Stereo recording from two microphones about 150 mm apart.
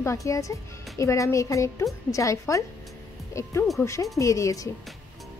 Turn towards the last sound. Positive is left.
turn(degrees=20)  # may be behind; listen again after turning